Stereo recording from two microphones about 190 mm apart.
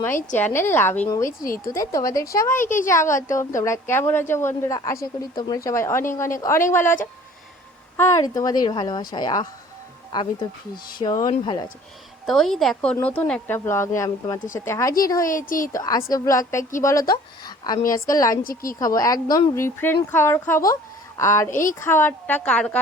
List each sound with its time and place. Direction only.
0.3 s speech: 10° left (ahead or behind)
2.6 s a woman's voice: 45° left (ahead or behind)
2.9 s speech: 15° left (ahead or behind)
7.9 s speech: 15° left (ahead or behind)
11.0 s speech: 20° left (ahead or behind)
12.2 s speech: centre (ahead or behind); by 15.3 s 20° left (ahead or behind)
15.3 s a woman's voice: 45° left (ahead or behind)
15.7 s speech: 15° left (ahead or behind)
18.4 s a woman's voice: 50° left (ahead or behind)
18.8 s speech: 20° left (ahead or behind)
21.5 s a woman's voice: 45° left (ahead or behind)
21.8 s speech: 10° left (ahead or behind)